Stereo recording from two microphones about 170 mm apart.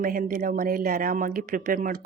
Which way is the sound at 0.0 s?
55° right (ahead or behind).